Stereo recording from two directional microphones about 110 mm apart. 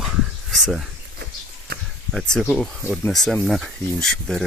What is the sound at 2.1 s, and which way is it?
Speech, 5° left (ahead or behind).